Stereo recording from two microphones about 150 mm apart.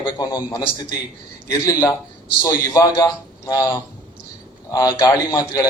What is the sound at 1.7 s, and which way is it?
A man's voice, 15° left (ahead or behind).